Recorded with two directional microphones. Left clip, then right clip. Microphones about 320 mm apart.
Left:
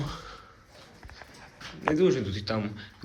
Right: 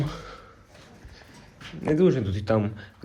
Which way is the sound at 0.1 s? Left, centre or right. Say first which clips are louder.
Right 2 dB; centre.